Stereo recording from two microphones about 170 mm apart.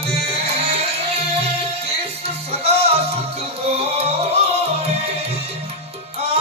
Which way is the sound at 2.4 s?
35° right (ahead or behind).